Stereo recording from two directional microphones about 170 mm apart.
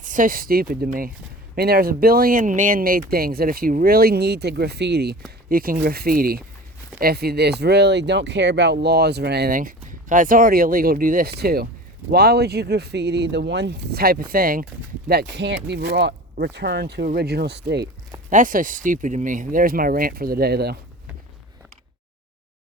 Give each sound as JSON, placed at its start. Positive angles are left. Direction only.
{"t": 0.0, "sound": "speech", "side_deg": -50}
{"t": 5.5, "sound": "speech", "side_deg": -60}
{"t": 18.3, "sound": "speech", "side_deg": -50}